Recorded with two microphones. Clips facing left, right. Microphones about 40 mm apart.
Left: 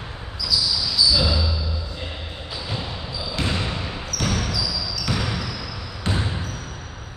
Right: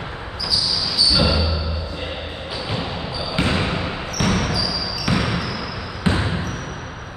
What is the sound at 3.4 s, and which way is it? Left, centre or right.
Basketball bounce, right.